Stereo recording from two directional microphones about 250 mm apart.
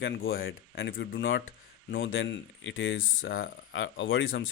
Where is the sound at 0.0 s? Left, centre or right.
Left.